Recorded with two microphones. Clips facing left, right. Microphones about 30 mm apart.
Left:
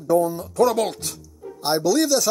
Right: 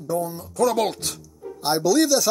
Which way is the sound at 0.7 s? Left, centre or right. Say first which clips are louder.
Even; centre.